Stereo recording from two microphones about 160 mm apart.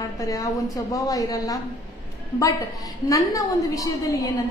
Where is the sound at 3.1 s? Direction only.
20° left (ahead or behind).